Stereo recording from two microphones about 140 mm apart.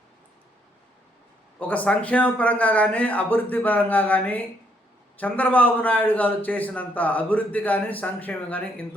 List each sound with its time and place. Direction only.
1.5 s a man's voice: 10° left (ahead or behind)